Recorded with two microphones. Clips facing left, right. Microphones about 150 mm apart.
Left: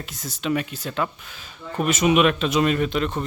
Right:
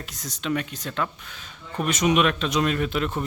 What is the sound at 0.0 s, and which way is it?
Speech, centre (ahead or behind).